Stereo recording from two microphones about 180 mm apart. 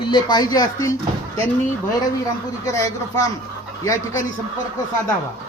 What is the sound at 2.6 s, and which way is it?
Speech, 15° left (ahead or behind).